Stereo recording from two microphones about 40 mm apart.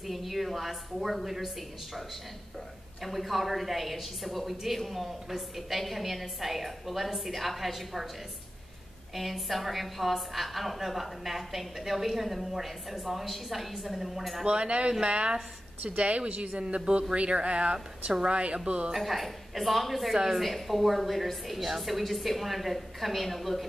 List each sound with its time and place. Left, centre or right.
0.0 s a woman's voice: centre
3.0 s a woman's voice: centre
9.1 s a woman's voice: centre
14.4 s a woman's voice: right
18.9 s a woman's voice: centre